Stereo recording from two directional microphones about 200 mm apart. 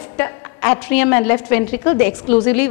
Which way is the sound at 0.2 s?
10° left (ahead or behind).